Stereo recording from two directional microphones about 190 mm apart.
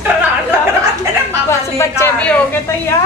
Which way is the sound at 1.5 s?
15° left (ahead or behind).